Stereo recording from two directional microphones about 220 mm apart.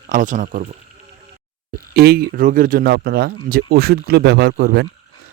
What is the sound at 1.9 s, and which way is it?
Speech, 45° right (ahead or behind).